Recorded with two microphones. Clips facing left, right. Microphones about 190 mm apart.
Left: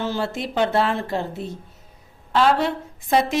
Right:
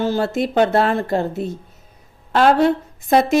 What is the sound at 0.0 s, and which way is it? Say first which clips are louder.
A woman's voice: right 6 dB; 45° right (ahead or behind).